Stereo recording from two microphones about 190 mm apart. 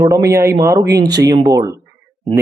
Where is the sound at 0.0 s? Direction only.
15° right (ahead or behind).